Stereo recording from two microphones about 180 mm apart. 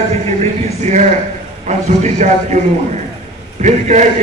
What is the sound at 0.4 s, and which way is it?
A man's voice, 40° right (ahead or behind).